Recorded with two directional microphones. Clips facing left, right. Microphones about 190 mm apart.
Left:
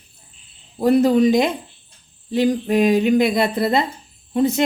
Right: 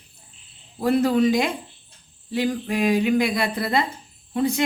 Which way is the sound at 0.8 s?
20° left (ahead or behind).